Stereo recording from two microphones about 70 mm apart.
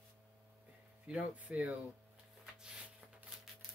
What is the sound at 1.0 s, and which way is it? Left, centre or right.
Speech, centre.